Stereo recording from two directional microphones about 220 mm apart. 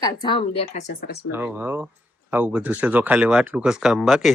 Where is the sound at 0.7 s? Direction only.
35° left (ahead or behind).